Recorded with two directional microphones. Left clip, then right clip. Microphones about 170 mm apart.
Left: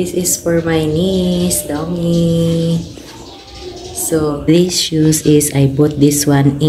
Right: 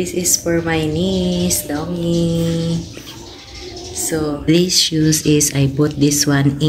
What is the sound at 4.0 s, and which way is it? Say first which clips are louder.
Speech: left 5 dB; 10° left (ahead or behind).